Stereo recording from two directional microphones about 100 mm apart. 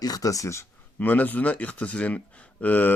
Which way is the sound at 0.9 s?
15° left (ahead or behind).